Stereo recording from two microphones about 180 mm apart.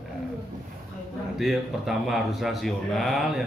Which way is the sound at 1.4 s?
Centre (ahead or behind).